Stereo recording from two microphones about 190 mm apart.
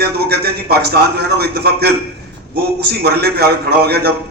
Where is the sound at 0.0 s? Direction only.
55° right (ahead or behind).